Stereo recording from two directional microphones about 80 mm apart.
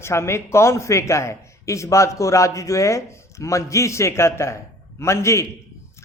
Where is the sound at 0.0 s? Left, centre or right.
Left.